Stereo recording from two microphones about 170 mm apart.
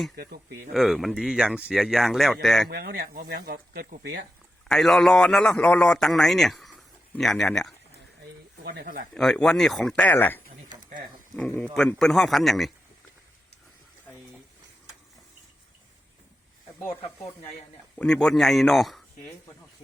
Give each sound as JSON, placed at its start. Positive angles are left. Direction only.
{"t": 0.2, "sound": "speech", "side_deg": -65}
{"t": 0.7, "sound": "a man's voice", "side_deg": 0}
{"t": 2.6, "sound": "speech", "side_deg": -60}
{"t": 4.7, "sound": "a man's voice", "side_deg": 0}
{"t": 9.1, "sound": "a man's voice", "side_deg": 5}
{"t": 17.9, "sound": "a man's voice", "side_deg": 5}